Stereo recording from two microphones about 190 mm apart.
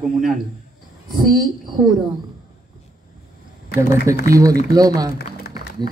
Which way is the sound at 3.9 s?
15° right (ahead or behind).